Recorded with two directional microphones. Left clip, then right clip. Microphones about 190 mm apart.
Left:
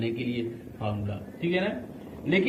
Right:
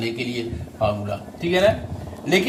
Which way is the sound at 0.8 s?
55° right (ahead or behind).